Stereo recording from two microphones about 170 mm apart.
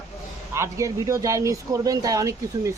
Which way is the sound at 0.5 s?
15° right (ahead or behind).